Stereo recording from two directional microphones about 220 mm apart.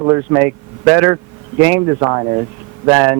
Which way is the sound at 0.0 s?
15° right (ahead or behind).